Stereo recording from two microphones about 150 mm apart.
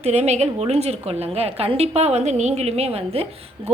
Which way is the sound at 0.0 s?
50° right (ahead or behind).